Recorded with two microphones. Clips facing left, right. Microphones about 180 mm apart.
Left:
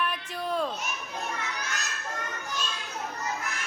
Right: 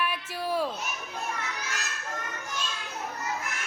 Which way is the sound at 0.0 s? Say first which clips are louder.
Even; 5° right (ahead or behind).